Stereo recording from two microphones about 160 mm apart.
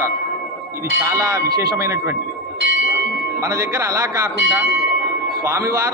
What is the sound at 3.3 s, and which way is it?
Speech, 20° right (ahead or behind).